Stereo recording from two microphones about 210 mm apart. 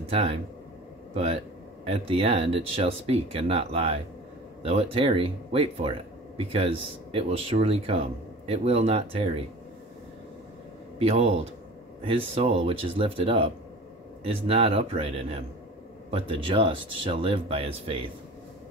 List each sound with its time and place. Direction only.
0.1 s speech: 30° right (ahead or behind)
11.0 s speech: 30° right (ahead or behind)